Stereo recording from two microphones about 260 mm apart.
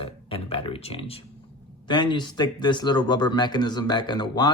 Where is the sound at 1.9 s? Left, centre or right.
Centre.